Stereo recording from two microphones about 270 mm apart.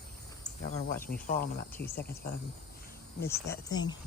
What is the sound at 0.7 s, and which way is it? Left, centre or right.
Speech, left.